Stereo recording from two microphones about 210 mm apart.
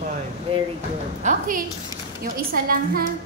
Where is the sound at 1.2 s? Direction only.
40° right (ahead or behind).